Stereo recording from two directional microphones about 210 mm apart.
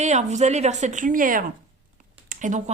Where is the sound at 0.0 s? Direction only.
35° right (ahead or behind).